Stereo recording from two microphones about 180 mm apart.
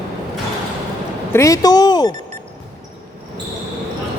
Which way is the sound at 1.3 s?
20° left (ahead or behind).